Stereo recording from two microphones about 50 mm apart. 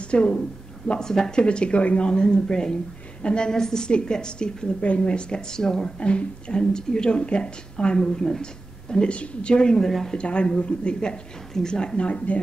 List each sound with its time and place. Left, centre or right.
0.1 s speech: left
10.1 s speech: left